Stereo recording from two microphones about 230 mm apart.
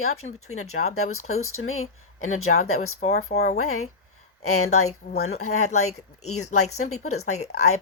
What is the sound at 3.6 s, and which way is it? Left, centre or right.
Speech, left.